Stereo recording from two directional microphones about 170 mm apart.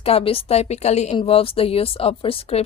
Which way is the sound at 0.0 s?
35° left (ahead or behind).